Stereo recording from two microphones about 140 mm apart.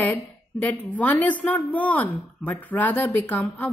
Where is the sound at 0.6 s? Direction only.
10° left (ahead or behind).